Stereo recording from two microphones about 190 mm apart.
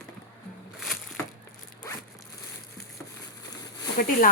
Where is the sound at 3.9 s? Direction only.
50° left (ahead or behind).